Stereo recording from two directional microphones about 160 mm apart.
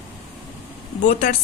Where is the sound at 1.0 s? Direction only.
55° left (ahead or behind).